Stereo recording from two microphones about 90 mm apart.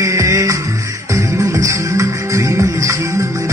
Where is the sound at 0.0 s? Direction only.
35° right (ahead or behind).